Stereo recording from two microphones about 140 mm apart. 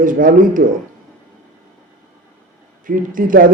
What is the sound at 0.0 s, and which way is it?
Speech, 75° right (ahead or behind).